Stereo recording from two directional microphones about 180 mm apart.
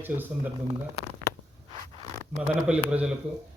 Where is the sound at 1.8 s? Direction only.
40° right (ahead or behind).